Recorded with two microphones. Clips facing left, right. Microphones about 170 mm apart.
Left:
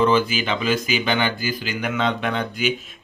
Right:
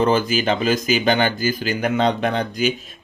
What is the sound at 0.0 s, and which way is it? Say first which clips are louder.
Speech: right 1 dB; 45° right (ahead or behind).